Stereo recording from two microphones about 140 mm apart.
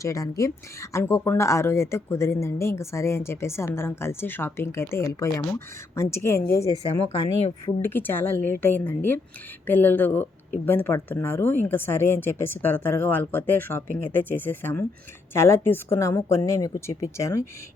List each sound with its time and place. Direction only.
0.0 s speech: 25° left (ahead or behind)
7.8 s speech: 15° left (ahead or behind)